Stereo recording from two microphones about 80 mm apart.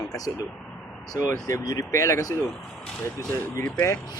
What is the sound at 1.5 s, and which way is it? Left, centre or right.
Speech, left.